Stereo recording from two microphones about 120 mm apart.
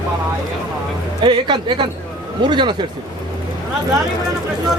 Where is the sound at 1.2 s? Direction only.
45° right (ahead or behind).